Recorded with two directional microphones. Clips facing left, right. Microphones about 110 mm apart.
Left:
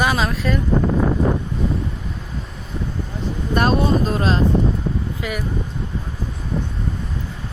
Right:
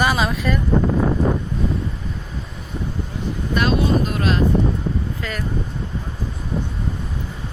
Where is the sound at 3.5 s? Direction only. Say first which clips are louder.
Left 1 dB; 40° left (ahead or behind).